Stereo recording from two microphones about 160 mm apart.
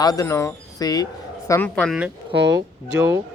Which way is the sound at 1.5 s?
10° left (ahead or behind).